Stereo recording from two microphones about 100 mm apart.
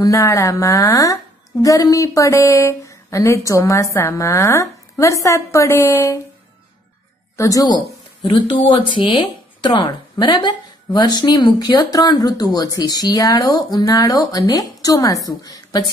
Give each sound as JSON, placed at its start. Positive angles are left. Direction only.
{"t": 0.0, "sound": "a woman's voice", "side_deg": 35}
{"t": 7.3, "sound": "speech", "side_deg": 35}
{"t": 8.2, "sound": "speech", "side_deg": 55}